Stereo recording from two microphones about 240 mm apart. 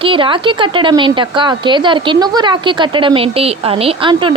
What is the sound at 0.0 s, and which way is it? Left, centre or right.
A woman's voice, right.